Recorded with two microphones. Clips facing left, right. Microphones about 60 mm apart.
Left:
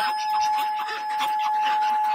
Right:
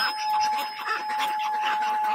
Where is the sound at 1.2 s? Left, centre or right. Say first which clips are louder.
Left 6 dB; centre.